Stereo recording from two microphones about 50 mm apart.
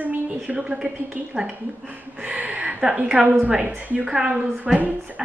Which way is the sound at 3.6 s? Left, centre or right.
Right.